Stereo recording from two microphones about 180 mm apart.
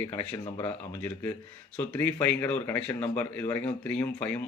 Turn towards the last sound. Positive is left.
turn(degrees=10)  # may be behind; listen again after turning